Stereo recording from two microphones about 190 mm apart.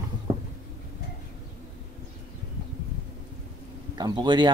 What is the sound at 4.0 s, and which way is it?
Speech, 20° right (ahead or behind).